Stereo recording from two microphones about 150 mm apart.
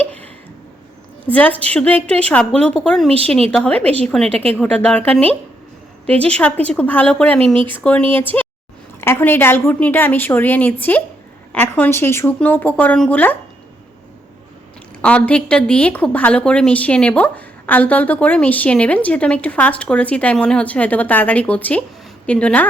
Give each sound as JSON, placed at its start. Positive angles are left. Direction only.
{"t": 0.0, "sound": "a sound", "side_deg": 10}
{"t": 1.2, "sound": "a woman's voice", "side_deg": 10}
{"t": 4.3, "sound": "speech", "side_deg": -40}
{"t": 4.5, "sound": "a woman's voice", "side_deg": 10}
{"t": 7.3, "sound": "speech", "side_deg": -35}
{"t": 8.1, "sound": "a woman's voice", "side_deg": 10}
{"t": 15.0, "sound": "a woman's voice", "side_deg": 10}